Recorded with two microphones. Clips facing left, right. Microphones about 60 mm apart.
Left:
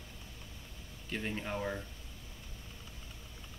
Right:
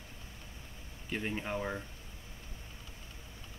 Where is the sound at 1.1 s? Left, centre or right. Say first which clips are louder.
Right 2 dB; centre.